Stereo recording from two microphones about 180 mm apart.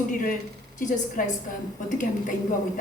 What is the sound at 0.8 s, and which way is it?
A woman's voice, 45° left (ahead or behind).